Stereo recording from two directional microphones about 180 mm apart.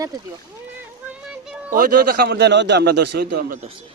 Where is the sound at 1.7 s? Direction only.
50° right (ahead or behind).